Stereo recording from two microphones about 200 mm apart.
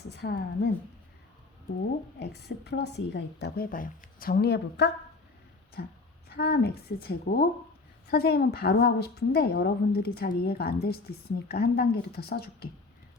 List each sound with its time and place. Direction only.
0.1 s a woman's voice: 55° left (ahead or behind)
2.1 s a woman's voice: 55° left (ahead or behind)